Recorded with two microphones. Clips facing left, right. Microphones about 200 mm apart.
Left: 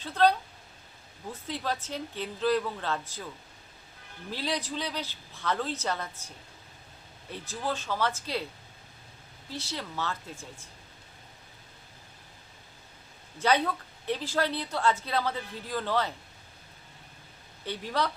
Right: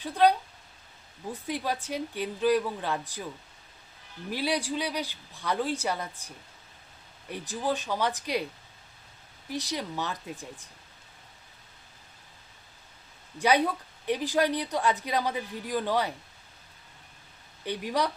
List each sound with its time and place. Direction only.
0.0 s a woman's voice: 15° right (ahead or behind)
4.3 s a woman's voice: 10° right (ahead or behind)
9.5 s a woman's voice: 15° right (ahead or behind)
13.4 s a woman's voice: 15° right (ahead or behind)
17.7 s a woman's voice: 15° right (ahead or behind)